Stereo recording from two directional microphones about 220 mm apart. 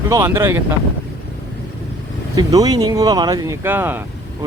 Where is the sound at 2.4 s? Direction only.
15° right (ahead or behind).